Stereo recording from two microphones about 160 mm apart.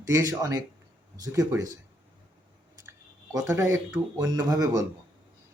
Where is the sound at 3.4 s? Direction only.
15° right (ahead or behind).